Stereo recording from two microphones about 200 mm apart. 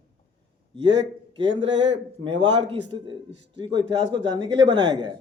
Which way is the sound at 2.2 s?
20° right (ahead or behind).